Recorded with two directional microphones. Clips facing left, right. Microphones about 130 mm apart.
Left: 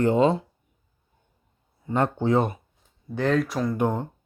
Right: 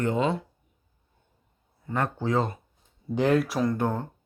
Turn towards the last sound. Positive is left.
turn(degrees=15)  # may be behind; listen again after turning